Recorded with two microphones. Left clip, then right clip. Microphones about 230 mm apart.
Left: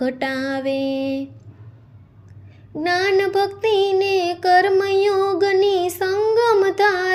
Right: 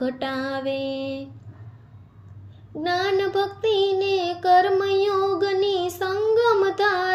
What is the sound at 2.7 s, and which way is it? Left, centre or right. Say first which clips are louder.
Child singing: left 4 dB; left.